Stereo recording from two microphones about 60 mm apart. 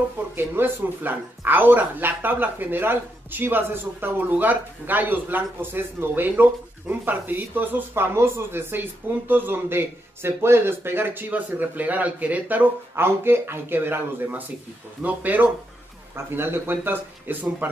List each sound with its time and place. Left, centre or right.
0.4 s speech: right
7.9 s speech: right
12.9 s speech: right
16.3 s speech: right